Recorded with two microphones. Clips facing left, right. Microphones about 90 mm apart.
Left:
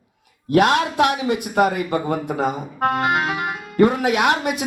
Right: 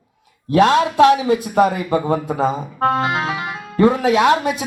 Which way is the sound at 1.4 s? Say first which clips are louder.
Right 2 dB; 25° right (ahead or behind).